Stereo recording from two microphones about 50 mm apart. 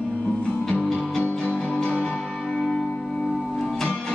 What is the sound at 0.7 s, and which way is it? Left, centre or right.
Music, centre.